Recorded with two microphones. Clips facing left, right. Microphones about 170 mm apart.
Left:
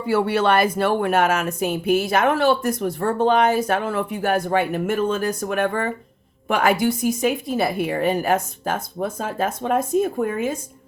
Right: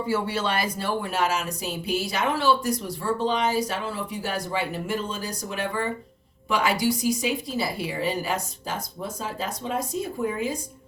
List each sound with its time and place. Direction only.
0.1 s speech: 60° left (ahead or behind)